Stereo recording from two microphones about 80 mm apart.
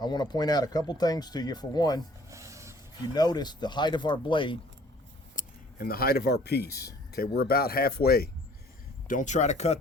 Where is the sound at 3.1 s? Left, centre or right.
Left.